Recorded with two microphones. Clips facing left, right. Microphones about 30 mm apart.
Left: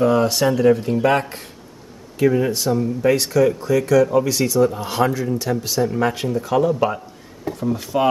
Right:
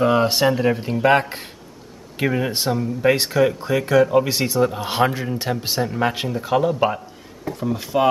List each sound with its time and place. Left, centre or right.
0.0 s speech: right
2.1 s speech: right
5.9 s speech: right